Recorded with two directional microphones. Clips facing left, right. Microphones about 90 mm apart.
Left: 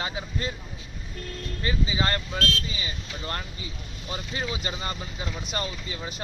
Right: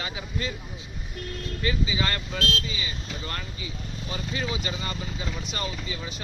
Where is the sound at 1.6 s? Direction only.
35° left (ahead or behind).